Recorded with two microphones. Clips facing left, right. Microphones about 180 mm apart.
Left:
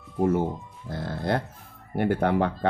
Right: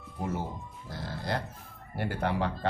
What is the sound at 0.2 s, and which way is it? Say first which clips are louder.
Speech: left 11 dB; 55° left (ahead or behind).